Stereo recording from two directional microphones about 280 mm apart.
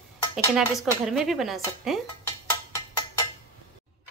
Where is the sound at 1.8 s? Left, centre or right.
Centre.